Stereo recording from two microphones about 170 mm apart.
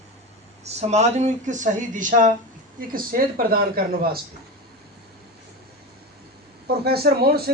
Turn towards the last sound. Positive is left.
turn(degrees=-65)  # may be behind; listen again after turning